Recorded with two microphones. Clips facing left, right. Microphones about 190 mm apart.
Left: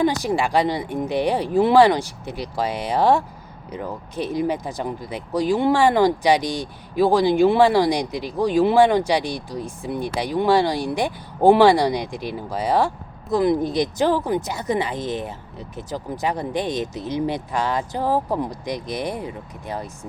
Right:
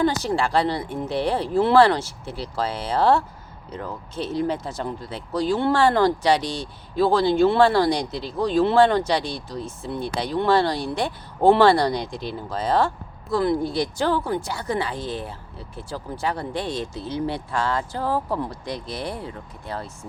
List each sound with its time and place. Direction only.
0.0 s speech: 15° left (ahead or behind)